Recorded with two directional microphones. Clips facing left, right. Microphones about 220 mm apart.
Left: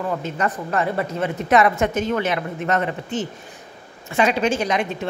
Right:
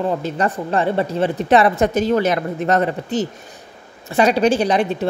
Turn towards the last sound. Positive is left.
turn(degrees=-35)  # may be behind; listen again after turning